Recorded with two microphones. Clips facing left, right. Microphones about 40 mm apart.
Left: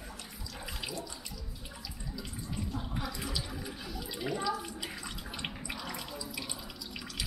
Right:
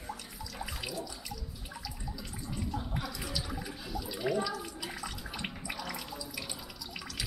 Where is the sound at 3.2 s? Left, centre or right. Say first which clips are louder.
Even; centre.